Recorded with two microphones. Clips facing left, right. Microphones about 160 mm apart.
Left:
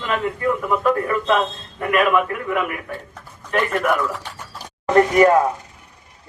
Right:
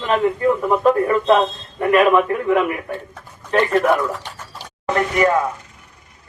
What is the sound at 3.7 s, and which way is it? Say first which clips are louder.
Speech: right 5 dB; 30° right (ahead or behind).